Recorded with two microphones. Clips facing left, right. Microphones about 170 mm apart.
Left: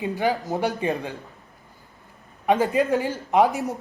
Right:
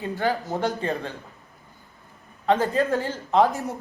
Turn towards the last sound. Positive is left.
turn(degrees=15)  # may be behind; listen again after turning